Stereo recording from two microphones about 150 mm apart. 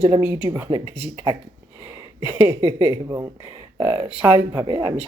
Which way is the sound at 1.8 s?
15° right (ahead or behind).